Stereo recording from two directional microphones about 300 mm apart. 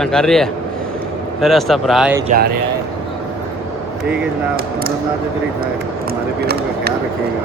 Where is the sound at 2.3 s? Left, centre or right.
Right.